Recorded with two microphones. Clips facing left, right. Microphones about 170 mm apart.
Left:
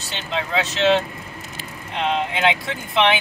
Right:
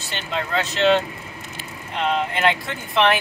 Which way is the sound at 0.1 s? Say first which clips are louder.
Left 1 dB; centre (ahead or behind).